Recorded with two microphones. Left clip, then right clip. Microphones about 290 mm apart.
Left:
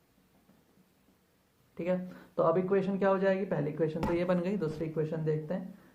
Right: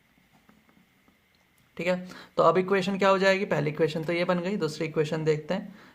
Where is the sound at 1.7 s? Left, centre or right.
Right.